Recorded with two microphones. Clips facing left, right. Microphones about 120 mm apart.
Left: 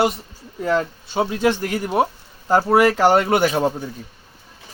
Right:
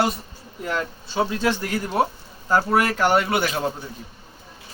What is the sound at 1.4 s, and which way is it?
Speech, 15° left (ahead or behind).